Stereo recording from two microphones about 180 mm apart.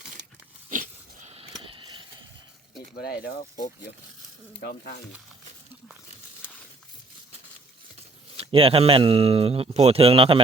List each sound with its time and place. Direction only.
0.7 s a sound: 45° right (ahead or behind); by 2.0 s 25° right (ahead or behind)
3.0 s speech: 60° left (ahead or behind)
4.6 s speech: 60° left (ahead or behind)
8.4 s speech: 30° right (ahead or behind)